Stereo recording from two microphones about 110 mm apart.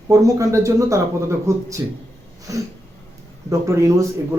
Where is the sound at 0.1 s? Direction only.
30° right (ahead or behind).